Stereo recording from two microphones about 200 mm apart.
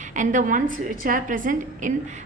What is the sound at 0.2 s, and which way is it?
A woman's voice, 40° right (ahead or behind).